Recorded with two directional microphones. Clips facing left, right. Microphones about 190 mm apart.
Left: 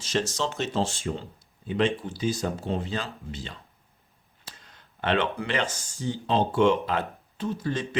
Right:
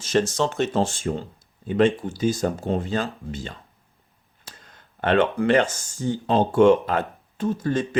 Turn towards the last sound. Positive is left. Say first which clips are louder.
# right 6 dB
turn(degrees=-50)  # may be behind; listen again after turning